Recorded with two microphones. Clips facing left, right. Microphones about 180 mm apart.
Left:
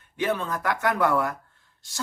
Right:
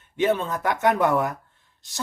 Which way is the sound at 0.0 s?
20° right (ahead or behind).